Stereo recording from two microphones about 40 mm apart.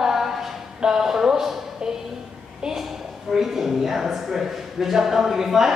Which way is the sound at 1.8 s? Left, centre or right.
Right.